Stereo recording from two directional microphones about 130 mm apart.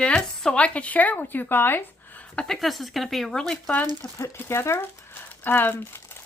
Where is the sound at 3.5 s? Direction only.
10° left (ahead or behind).